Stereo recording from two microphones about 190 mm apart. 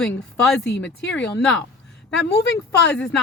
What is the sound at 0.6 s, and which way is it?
Speech, 65° left (ahead or behind).